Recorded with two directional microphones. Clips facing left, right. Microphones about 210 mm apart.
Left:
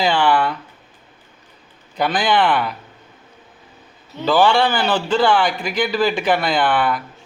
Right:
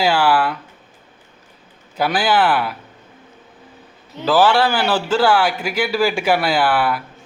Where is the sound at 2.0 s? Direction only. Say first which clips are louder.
Even; 5° right (ahead or behind).